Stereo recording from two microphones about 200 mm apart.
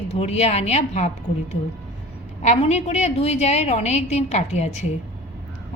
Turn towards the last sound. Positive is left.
turn(degrees=35)  # may be behind; listen again after turning